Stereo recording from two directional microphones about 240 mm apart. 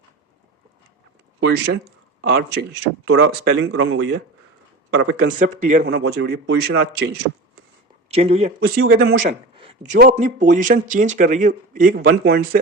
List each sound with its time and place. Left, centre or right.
1.5 s speech: right
3.7 s speech: right
5.4 s speech: right
5.9 s speech: right
8.1 s speech: right
8.6 s speech: right
9.6 s speech: right